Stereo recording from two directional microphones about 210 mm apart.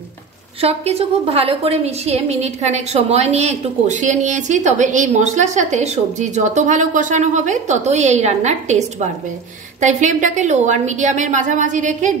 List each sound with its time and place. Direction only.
0.6 s a woman's voice: 30° right (ahead or behind)